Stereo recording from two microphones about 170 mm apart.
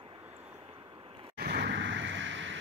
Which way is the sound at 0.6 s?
30° right (ahead or behind).